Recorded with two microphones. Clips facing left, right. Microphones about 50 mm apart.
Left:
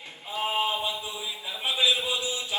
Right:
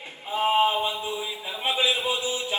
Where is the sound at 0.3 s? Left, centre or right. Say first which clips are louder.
Right 6 dB; right.